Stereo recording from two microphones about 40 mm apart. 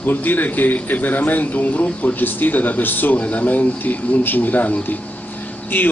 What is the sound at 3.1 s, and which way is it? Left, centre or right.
Speech, left.